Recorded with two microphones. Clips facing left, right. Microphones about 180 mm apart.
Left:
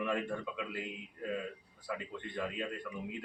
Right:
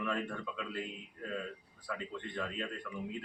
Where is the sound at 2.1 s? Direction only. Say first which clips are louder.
Left 1 dB; 15° left (ahead or behind).